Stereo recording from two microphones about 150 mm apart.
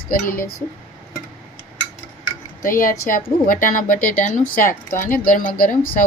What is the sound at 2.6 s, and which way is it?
Speech, 65° left (ahead or behind).